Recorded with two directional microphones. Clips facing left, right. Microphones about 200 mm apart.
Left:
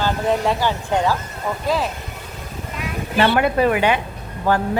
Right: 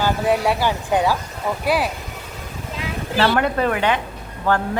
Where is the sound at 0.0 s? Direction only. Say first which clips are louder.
Right 1 dB; 10° right (ahead or behind).